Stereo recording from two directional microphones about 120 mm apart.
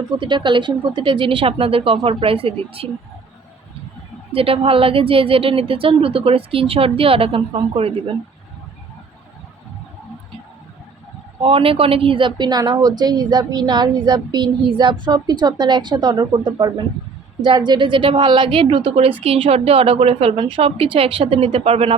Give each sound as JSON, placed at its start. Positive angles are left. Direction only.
{"t": 0.2, "sound": "a woman's voice", "side_deg": -40}
{"t": 4.3, "sound": "a woman's voice", "side_deg": -50}
{"t": 11.3, "sound": "a woman's voice", "side_deg": -50}